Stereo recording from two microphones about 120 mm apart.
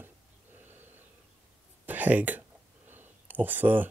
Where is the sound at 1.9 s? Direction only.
15° right (ahead or behind).